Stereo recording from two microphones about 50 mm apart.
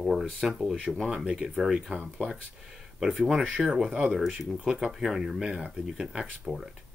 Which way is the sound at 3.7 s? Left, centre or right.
Centre.